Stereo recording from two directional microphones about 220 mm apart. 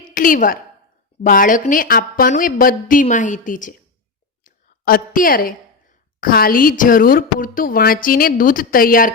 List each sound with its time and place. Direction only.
0.1 s a woman's voice: 40° left (ahead or behind)
4.4 s a sound: 40° left (ahead or behind)
6.1 s a woman's voice: 40° left (ahead or behind)